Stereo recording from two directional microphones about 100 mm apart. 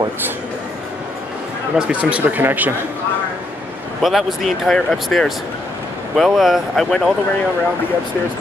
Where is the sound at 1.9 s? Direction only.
10° right (ahead or behind).